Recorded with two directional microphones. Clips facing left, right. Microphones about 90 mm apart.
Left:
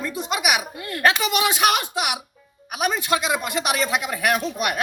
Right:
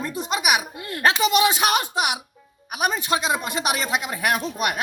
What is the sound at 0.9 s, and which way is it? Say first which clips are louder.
Speech: right 1 dB; 30° right (ahead or behind).